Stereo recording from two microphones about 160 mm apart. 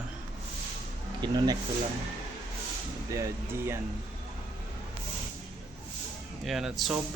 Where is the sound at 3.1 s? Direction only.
20° right (ahead or behind).